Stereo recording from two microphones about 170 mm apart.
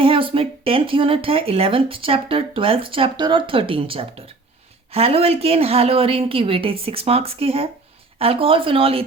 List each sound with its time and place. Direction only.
0.0 s speech: 30° right (ahead or behind)